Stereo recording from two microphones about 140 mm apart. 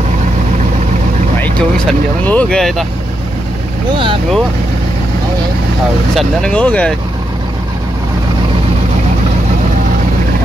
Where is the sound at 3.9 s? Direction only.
35° right (ahead or behind).